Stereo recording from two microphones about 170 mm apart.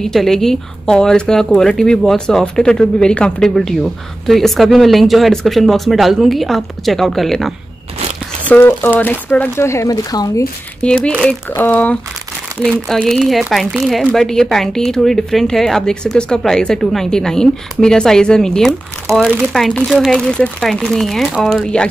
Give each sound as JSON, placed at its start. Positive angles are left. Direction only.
{"t": 0.0, "sound": "speech", "side_deg": 0}
{"t": 8.5, "sound": "speech", "side_deg": 10}
{"t": 10.8, "sound": "speech", "side_deg": 5}
{"t": 12.6, "sound": "speech", "side_deg": -5}
{"t": 19.1, "sound": "speech", "side_deg": -15}
{"t": 19.5, "sound": "speech", "side_deg": 0}